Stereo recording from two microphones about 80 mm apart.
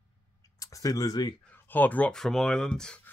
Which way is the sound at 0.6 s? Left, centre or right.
Left.